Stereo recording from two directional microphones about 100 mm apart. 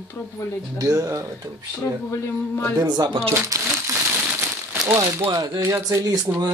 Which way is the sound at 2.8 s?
40° right (ahead or behind).